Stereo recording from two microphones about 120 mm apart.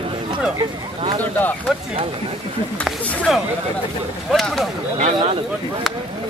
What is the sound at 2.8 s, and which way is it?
Speech, centre (ahead or behind).